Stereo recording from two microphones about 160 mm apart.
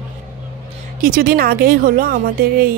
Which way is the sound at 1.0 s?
60° right (ahead or behind).